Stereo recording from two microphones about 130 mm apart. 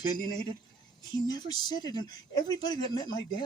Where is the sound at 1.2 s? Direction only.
35° left (ahead or behind).